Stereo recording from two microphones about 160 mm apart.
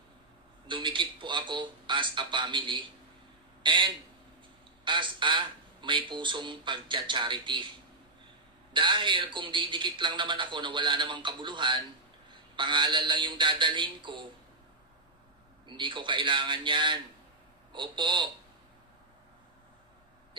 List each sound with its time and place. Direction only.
0.7 s a man's voice: 30° right (ahead or behind)
8.7 s a man's voice: 30° right (ahead or behind)
15.6 s a man's voice: 30° right (ahead or behind)